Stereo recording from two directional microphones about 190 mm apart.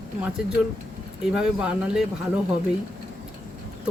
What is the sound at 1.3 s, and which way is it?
Speech, 5° right (ahead or behind).